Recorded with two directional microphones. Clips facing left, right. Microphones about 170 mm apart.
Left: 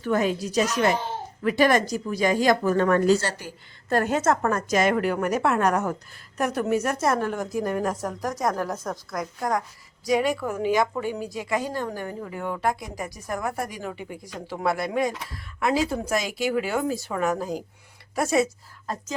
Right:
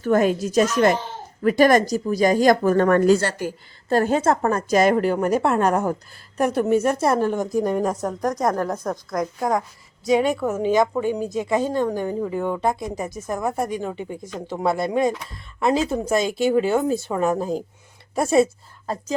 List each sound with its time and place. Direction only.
0.0 s speech: 45° right (ahead or behind)
3.8 s a woman's voice: 30° right (ahead or behind)
7.8 s a woman's voice: centre (ahead or behind)
10.1 s a woman's voice: 25° right (ahead or behind)